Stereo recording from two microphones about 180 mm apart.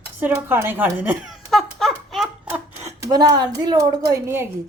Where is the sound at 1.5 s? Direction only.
Centre (ahead or behind).